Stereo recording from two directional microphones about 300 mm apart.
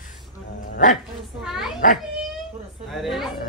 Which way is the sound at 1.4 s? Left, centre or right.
Centre.